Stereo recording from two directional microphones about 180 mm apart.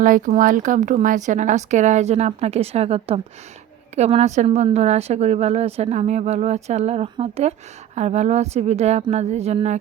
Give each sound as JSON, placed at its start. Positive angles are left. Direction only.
{"t": 0.0, "sound": "a woman's voice", "side_deg": -45}